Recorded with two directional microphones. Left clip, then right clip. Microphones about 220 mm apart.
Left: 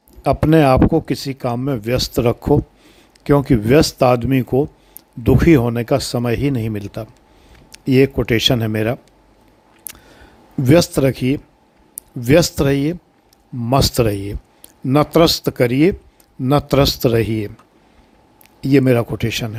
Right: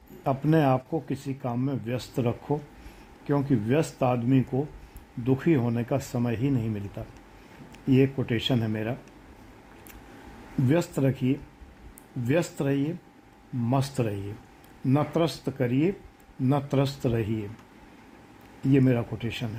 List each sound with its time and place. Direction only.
0.2 s speech: 25° left (ahead or behind)
10.7 s speech: 30° left (ahead or behind)
18.7 s speech: 30° left (ahead or behind)